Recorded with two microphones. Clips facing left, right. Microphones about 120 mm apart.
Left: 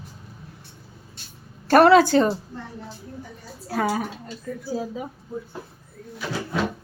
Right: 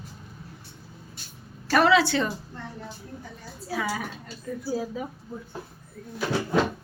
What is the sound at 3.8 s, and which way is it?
Speech, 40° left (ahead or behind).